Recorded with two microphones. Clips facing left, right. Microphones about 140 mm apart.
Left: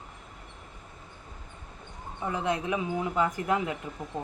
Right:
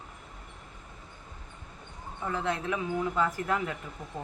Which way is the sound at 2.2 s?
15° left (ahead or behind).